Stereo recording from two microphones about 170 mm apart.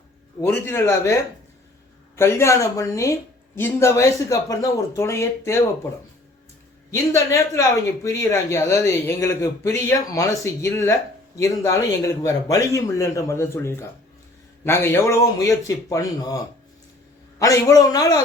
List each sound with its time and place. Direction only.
0.4 s speech: 10° left (ahead or behind)
2.1 s speech: 15° left (ahead or behind)
6.9 s speech: 15° left (ahead or behind)
17.4 s a man's voice: 20° left (ahead or behind)